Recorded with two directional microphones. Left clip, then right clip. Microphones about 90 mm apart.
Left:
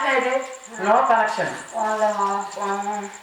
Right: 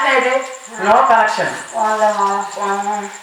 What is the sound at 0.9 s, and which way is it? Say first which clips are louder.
Speech: right 6 dB; 25° left (ahead or behind).